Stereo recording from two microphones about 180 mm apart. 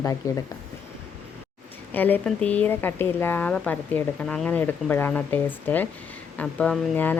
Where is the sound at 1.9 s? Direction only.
10° left (ahead or behind).